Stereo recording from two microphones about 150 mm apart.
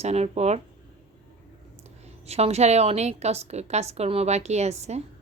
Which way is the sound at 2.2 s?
45° right (ahead or behind).